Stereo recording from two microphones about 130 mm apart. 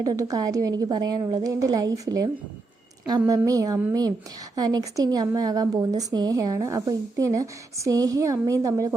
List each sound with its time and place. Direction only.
0.0 s speech: 25° right (ahead or behind)